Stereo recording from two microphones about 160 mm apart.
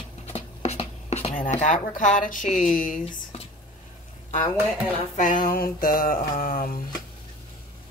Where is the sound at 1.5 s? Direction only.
50° left (ahead or behind).